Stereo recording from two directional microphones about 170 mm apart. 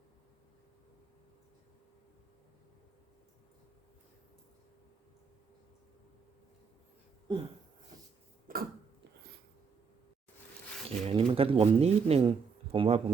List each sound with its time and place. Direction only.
7.3 s a sound: 25° right (ahead or behind)
8.5 s throat clearing: 55° right (ahead or behind)
10.8 s speech: 35° right (ahead or behind)